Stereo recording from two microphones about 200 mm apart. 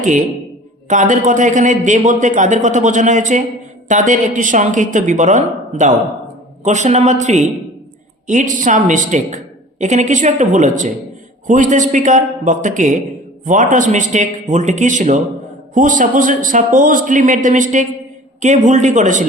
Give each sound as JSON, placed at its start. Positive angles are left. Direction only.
{"t": 0.9, "sound": "a man's voice", "side_deg": -40}